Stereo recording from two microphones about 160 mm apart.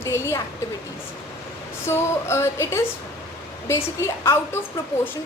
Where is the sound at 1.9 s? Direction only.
15° left (ahead or behind).